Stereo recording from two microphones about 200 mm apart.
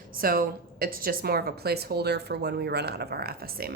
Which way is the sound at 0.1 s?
45° right (ahead or behind).